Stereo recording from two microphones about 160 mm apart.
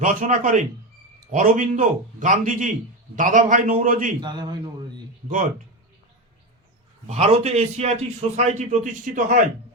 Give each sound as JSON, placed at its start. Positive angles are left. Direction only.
{"t": 0.0, "sound": "a man's voice", "side_deg": -55}
{"t": 4.2, "sound": "a man's voice", "side_deg": -25}
{"t": 7.1, "sound": "a man's voice", "side_deg": -40}